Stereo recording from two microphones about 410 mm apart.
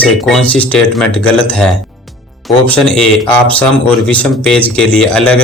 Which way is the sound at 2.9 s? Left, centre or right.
Centre.